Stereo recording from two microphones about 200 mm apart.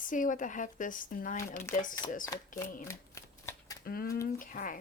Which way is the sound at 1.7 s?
40° left (ahead or behind).